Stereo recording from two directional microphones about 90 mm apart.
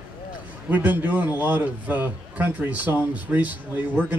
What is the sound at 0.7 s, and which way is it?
A man's voice, 20° right (ahead or behind).